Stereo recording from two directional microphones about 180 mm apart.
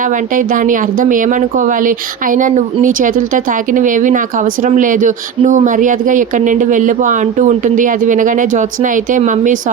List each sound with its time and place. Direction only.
0.0 s speech: 45° right (ahead or behind)